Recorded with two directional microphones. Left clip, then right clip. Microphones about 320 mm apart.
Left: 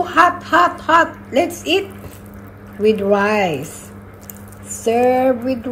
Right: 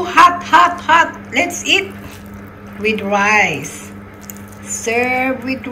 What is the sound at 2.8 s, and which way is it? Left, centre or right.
Speech, centre.